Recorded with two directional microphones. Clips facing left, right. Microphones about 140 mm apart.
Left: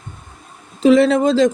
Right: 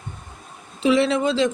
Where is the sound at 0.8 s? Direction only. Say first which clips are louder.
Left 7 dB; 40° left (ahead or behind).